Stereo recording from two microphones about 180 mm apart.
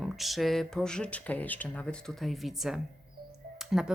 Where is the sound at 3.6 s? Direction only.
5° right (ahead or behind).